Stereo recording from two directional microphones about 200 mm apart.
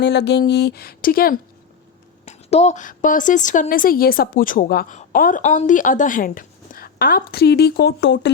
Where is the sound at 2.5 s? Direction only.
35° left (ahead or behind).